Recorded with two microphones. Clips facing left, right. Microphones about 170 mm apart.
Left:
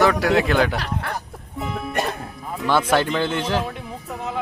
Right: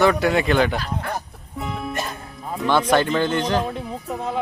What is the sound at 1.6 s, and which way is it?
Music, centre (ahead or behind).